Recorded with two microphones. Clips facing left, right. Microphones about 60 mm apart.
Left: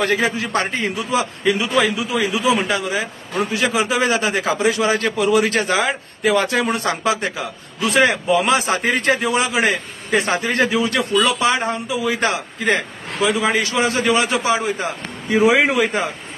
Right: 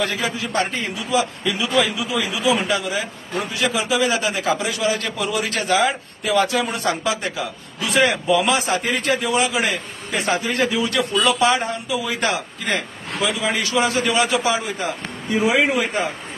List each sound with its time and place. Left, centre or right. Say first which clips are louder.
0.0 s a man's voice: left 4 dB; left
15.4 s a man's voice: left 3 dB; left